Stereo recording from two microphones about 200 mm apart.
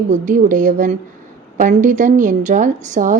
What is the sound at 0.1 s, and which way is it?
Speech, 40° right (ahead or behind).